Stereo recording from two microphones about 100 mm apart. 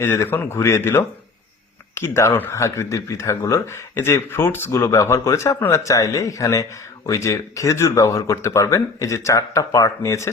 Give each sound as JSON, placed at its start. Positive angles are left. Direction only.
{"t": 0.0, "sound": "speech", "side_deg": 25}